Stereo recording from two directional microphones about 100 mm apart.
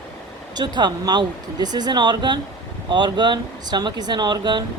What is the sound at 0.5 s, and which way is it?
Speech, 45° right (ahead or behind).